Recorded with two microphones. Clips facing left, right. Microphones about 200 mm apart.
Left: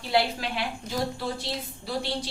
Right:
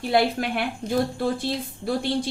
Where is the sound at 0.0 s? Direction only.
55° right (ahead or behind).